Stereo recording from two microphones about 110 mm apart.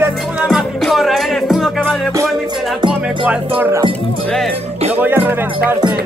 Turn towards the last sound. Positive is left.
turn(degrees=-20)  # may be behind; listen again after turning